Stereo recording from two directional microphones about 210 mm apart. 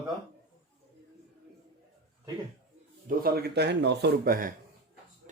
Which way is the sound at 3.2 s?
50° right (ahead or behind).